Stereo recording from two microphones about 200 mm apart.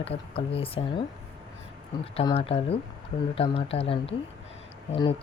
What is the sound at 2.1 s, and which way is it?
Speech, 30° left (ahead or behind).